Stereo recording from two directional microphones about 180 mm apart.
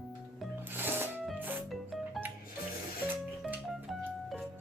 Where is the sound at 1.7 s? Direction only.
Centre (ahead or behind).